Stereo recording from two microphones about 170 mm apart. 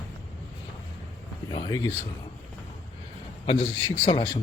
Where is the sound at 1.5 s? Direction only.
25° left (ahead or behind).